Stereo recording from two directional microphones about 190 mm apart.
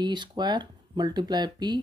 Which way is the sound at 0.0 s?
25° right (ahead or behind).